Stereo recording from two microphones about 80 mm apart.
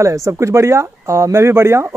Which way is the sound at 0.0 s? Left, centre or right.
Right.